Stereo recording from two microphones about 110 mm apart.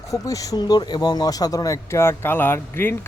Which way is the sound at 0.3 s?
30° left (ahead or behind).